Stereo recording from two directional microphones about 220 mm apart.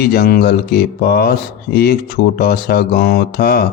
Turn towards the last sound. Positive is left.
turn(degrees=45)  # may be behind; listen again after turning